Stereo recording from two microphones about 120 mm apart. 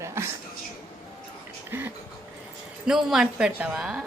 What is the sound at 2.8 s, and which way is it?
A woman's voice, 5° right (ahead or behind).